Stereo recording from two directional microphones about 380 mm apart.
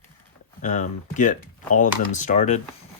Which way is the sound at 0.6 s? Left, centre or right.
Centre.